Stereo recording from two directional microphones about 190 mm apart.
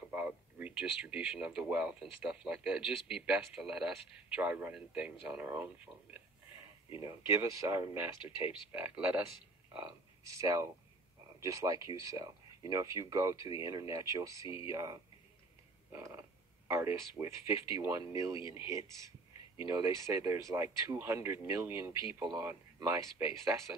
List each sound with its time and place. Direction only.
0.1 s speech: 10° right (ahead or behind)
7.0 s speech: 15° right (ahead or behind)
8.2 s speech: 25° left (ahead or behind)
8.8 s speech: 10° right (ahead or behind)
18.4 s speech: 25° left (ahead or behind)
19.6 s speech: 15° right (ahead or behind)